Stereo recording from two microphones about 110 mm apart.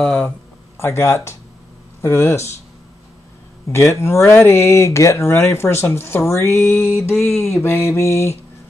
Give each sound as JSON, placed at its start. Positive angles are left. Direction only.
{"t": 0.0, "sound": "a sound", "side_deg": 5}
{"t": 0.7, "sound": "speech", "side_deg": 25}
{"t": 3.6, "sound": "speech", "side_deg": 25}